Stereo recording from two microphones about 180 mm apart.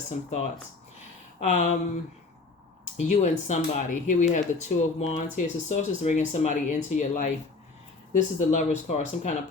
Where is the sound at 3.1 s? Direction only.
40° left (ahead or behind).